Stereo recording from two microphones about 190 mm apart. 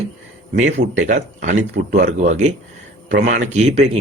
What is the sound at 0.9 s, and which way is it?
A man's voice, 40° right (ahead or behind).